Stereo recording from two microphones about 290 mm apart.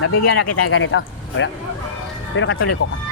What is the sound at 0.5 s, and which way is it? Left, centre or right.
Speech, left.